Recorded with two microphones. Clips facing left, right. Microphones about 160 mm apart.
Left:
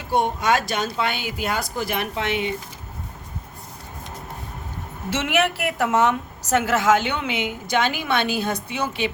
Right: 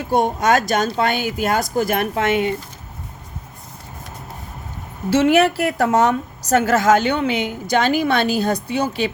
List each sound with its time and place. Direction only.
0.1 s speech: 40° right (ahead or behind)
5.1 s a woman's voice: 35° right (ahead or behind)